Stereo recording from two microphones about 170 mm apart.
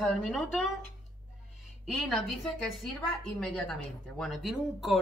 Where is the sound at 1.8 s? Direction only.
Centre (ahead or behind).